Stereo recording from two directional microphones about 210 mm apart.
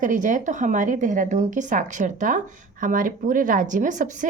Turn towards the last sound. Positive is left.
turn(degrees=-35)  # may be behind; listen again after turning